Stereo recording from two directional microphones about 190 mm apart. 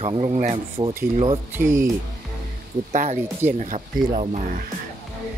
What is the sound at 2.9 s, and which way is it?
Speech, 35° right (ahead or behind).